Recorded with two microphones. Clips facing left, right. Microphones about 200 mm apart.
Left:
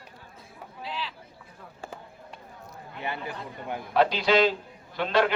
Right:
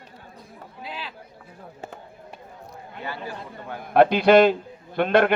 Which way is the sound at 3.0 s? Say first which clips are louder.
Even; 20° left (ahead or behind).